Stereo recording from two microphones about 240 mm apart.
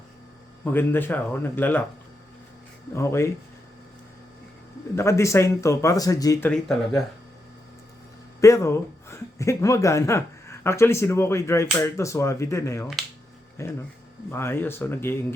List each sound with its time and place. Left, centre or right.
0.6 s speech: centre
2.9 s speech: centre
4.9 s speech: centre
8.4 s speech: centre